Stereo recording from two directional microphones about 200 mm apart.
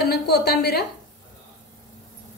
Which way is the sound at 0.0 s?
55° left (ahead or behind).